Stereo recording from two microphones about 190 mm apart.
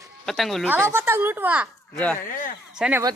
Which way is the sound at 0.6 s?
10° right (ahead or behind).